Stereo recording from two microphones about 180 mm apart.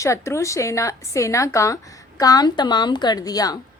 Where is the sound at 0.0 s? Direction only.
15° left (ahead or behind).